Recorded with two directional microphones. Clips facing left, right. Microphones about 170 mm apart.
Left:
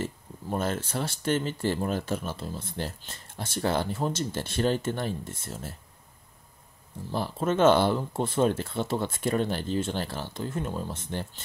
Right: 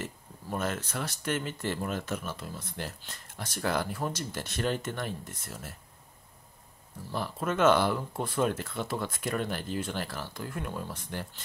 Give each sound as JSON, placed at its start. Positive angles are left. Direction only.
{"t": 0.0, "sound": "speech", "side_deg": 30}
{"t": 7.1, "sound": "speech", "side_deg": 30}